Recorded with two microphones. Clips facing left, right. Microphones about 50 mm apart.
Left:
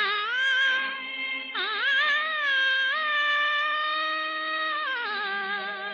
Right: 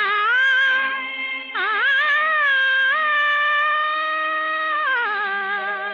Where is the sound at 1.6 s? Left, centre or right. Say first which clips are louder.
Right 8 dB; right.